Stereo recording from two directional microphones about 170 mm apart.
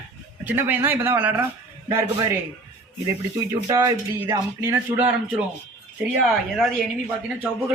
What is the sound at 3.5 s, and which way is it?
Speech, 15° right (ahead or behind).